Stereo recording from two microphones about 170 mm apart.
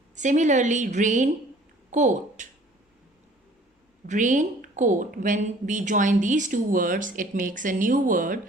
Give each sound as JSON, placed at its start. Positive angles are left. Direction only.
{"t": 0.2, "sound": "a woman's voice", "side_deg": -45}
{"t": 4.0, "sound": "speech", "side_deg": -50}